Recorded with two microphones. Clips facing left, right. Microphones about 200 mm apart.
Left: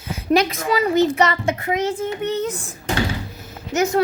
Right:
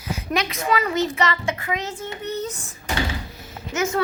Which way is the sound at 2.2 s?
60° left (ahead or behind).